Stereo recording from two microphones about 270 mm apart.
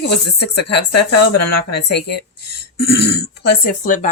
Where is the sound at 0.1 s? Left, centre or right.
Left.